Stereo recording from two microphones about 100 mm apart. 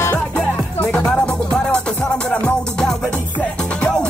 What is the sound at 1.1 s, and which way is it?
Music, 10° left (ahead or behind).